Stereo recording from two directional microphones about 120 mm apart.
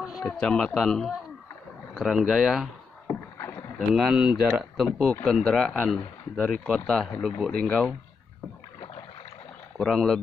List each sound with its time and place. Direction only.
0.1 s speech: 5° left (ahead or behind)
3.1 s rowboat: 20° left (ahead or behind)
3.7 s speech: 5° right (ahead or behind)
9.8 s speech: centre (ahead or behind)